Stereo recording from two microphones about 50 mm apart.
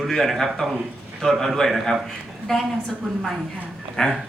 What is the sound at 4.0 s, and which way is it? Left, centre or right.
Speech, centre.